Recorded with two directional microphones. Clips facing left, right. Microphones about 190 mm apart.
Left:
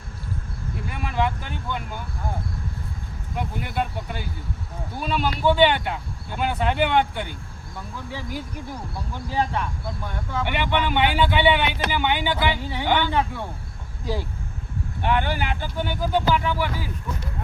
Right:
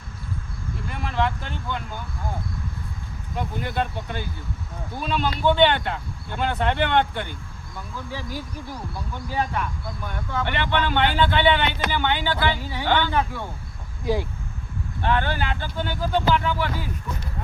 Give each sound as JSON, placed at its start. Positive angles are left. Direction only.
{"t": 0.9, "sound": "a man's voice", "side_deg": 10}
{"t": 3.3, "sound": "a man's voice", "side_deg": 10}
{"t": 9.3, "sound": "speech", "side_deg": 25}
{"t": 10.4, "sound": "a man's voice", "side_deg": 10}
{"t": 14.0, "sound": "speech", "side_deg": -15}
{"t": 15.0, "sound": "a man's voice", "side_deg": 15}